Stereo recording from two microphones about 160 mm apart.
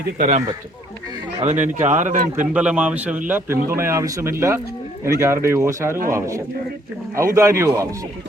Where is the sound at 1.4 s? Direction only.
45° right (ahead or behind).